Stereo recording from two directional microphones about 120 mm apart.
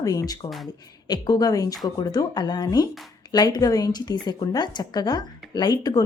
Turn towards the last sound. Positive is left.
turn(degrees=30)  # may be behind; listen again after turning